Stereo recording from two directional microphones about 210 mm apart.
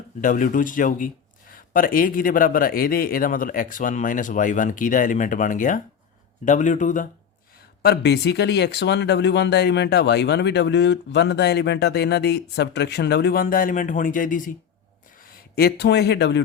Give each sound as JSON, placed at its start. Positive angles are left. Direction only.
{"t": 0.2, "sound": "speech", "side_deg": 40}
{"t": 7.8, "sound": "speech", "side_deg": 50}